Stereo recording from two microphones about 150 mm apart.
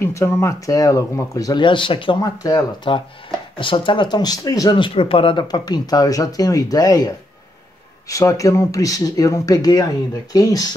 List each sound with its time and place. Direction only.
0.0 s speech: 15° left (ahead or behind)